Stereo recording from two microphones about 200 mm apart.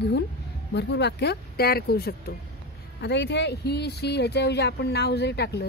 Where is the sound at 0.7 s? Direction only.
60° left (ahead or behind).